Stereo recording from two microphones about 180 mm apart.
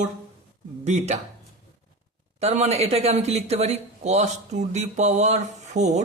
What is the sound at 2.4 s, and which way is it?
Speech, 35° right (ahead or behind).